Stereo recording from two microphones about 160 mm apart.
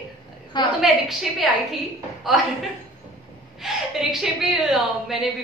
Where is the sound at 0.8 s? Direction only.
Centre (ahead or behind).